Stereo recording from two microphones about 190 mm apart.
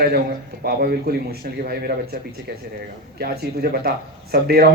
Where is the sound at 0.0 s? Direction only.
50° right (ahead or behind).